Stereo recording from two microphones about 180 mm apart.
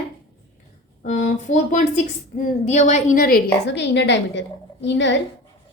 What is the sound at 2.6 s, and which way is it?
A woman's voice, 40° left (ahead or behind).